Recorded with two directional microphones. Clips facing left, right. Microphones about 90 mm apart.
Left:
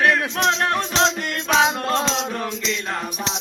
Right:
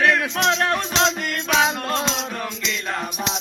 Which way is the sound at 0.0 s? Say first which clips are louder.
Even; 20° left (ahead or behind).